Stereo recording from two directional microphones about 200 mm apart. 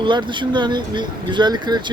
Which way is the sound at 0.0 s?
25° right (ahead or behind).